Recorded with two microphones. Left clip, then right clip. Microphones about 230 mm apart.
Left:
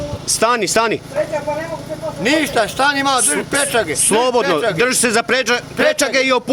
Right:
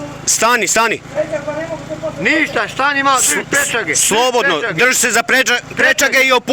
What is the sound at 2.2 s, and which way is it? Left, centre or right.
Speech, centre.